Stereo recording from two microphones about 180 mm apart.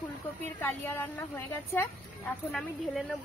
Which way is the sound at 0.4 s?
10° left (ahead or behind).